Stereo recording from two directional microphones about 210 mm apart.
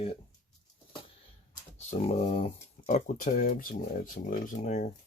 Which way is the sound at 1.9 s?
30° left (ahead or behind).